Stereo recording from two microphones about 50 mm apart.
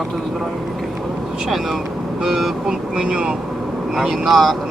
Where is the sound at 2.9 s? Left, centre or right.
Centre.